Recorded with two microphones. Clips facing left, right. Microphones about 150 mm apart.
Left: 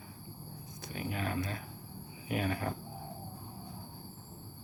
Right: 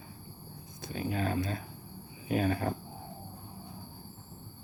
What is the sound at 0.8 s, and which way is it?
Speech, 30° right (ahead or behind).